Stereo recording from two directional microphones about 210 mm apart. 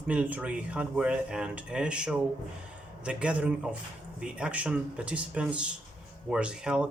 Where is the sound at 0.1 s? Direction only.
5° right (ahead or behind).